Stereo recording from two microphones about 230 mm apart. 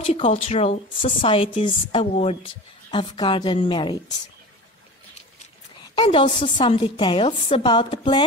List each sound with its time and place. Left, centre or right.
0.0 s a woman's voice: left
6.0 s a woman's voice: left